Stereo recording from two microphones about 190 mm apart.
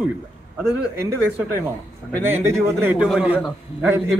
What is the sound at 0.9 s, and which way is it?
Speech, 15° right (ahead or behind).